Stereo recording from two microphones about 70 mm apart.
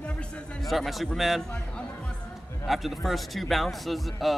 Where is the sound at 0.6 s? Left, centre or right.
Centre.